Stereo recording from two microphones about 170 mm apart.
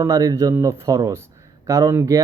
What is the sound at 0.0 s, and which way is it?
Speech, 20° right (ahead or behind).